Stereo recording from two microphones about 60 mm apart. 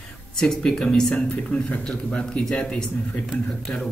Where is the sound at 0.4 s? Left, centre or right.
Centre.